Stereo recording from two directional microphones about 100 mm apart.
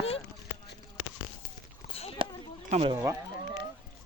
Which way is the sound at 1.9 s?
70° left (ahead or behind).